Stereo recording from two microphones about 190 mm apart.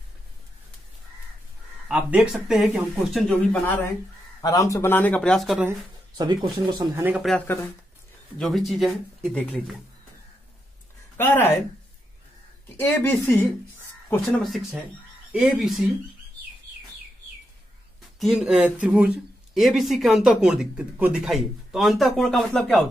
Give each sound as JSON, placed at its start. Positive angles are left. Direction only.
{"t": 1.9, "sound": "speech", "side_deg": -5}
{"t": 4.4, "sound": "speech", "side_deg": 15}
{"t": 5.7, "sound": "speech", "side_deg": -20}
{"t": 7.0, "sound": "speech", "side_deg": -10}
{"t": 7.2, "sound": "speech", "side_deg": 10}
{"t": 11.1, "sound": "speech", "side_deg": 10}
{"t": 12.7, "sound": "speech", "side_deg": 10}
{"t": 14.4, "sound": "speech", "side_deg": 0}
{"t": 18.2, "sound": "speech", "side_deg": 0}